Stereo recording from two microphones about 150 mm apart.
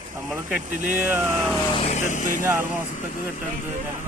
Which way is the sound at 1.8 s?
50° left (ahead or behind).